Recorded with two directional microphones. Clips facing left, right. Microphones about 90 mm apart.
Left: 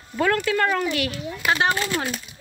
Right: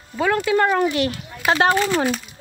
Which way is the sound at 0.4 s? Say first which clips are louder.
Right 4 dB; 20° right (ahead or behind).